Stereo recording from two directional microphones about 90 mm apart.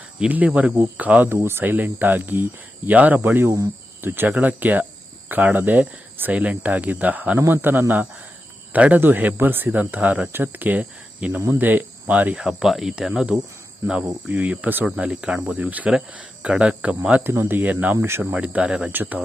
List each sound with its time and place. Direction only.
0.2 s speech: 15° right (ahead or behind)
11.6 s cricket: 20° right (ahead or behind)
12.4 s speech: 5° right (ahead or behind)